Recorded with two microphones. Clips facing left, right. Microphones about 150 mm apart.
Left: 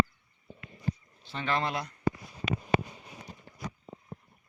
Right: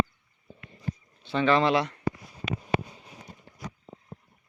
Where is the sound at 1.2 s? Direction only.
85° right.